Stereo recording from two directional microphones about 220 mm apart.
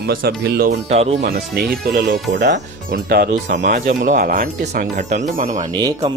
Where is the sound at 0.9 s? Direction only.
30° right (ahead or behind).